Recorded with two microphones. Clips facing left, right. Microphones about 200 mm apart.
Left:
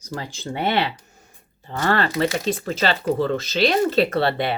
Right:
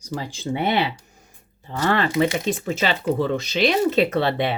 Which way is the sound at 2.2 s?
20° right (ahead or behind).